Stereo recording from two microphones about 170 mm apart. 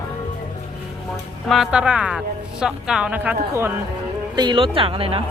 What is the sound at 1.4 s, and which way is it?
A woman's voice, centre (ahead or behind).